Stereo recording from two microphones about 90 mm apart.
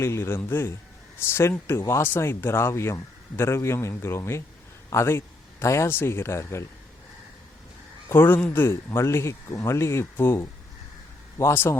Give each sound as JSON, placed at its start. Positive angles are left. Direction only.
{"t": 0.0, "sound": "a man's voice", "side_deg": 30}
{"t": 8.1, "sound": "speech", "side_deg": 25}
{"t": 8.6, "sound": "speech", "side_deg": 30}